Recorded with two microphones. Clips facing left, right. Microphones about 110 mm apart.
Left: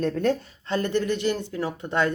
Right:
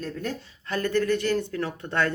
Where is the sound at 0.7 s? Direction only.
20° left (ahead or behind).